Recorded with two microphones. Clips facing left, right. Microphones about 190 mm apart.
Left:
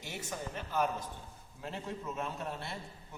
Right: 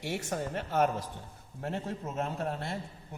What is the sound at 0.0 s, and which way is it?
A man's voice, 65° right (ahead or behind).